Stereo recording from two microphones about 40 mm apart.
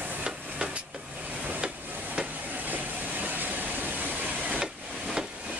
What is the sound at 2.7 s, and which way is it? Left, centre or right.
Train, right.